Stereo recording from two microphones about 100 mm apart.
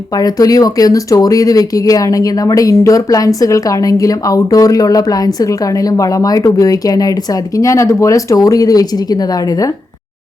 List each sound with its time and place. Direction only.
0.2 s speech: 40° left (ahead or behind)